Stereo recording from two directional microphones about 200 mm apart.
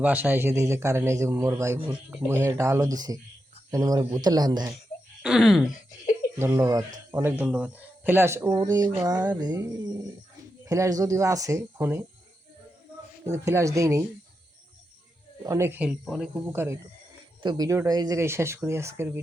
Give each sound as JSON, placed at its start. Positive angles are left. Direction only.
{"t": 0.0, "sound": "a man's voice", "side_deg": -10}
{"t": 5.2, "sound": "speech", "side_deg": 0}
{"t": 6.4, "sound": "a man's voice", "side_deg": -15}
{"t": 13.2, "sound": "a man's voice", "side_deg": -15}
{"t": 15.4, "sound": "a man's voice", "side_deg": -15}